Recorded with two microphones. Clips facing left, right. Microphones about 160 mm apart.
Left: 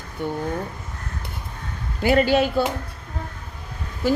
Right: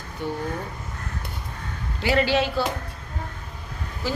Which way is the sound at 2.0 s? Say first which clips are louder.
Left 4 dB; 50° left (ahead or behind).